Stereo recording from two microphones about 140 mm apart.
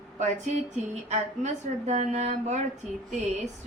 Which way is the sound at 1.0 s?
55° right (ahead or behind).